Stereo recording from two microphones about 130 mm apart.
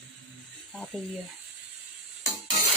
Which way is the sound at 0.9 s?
Centre (ahead or behind).